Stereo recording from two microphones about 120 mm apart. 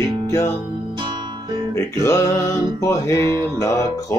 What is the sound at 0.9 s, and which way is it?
Music, 40° right (ahead or behind).